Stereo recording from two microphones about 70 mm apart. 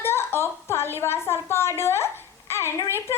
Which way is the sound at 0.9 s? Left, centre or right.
Left.